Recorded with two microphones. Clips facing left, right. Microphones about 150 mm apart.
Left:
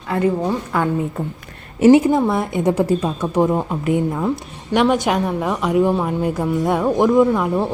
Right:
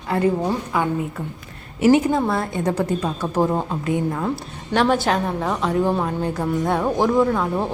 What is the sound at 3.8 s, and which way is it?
Speech, 20° left (ahead or behind).